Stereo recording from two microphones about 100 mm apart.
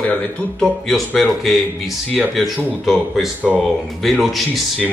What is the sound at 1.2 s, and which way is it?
Speech, centre (ahead or behind).